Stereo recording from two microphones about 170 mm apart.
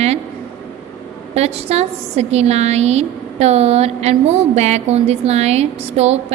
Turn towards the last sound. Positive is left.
turn(degrees=-40)  # may be behind; listen again after turning